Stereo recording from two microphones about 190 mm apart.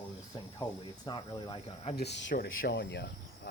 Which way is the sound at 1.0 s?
25° left (ahead or behind).